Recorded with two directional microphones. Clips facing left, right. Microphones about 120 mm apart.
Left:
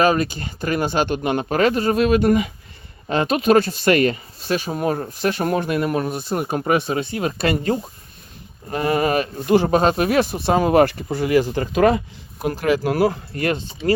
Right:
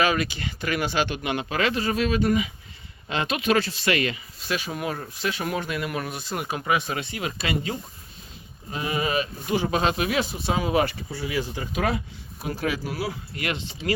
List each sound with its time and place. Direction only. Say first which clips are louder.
0.0 s speech: left 6 dB; 40° left (ahead or behind)
6.8 s speech: left 7 dB; 35° left (ahead or behind); by 11.0 s 55° left (ahead or behind)
11.1 s speech: left 11 dB; 85° left; by 13.9 s 40° left (ahead or behind)